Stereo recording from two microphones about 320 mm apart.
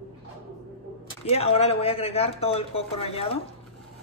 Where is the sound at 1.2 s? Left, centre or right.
Centre.